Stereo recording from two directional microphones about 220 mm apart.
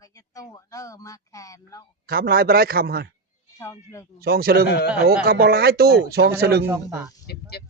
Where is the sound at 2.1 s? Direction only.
45° right (ahead or behind).